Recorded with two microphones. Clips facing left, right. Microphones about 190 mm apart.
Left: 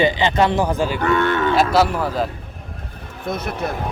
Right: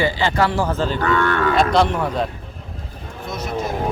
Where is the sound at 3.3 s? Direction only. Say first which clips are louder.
Left 1 dB; 60° left (ahead or behind).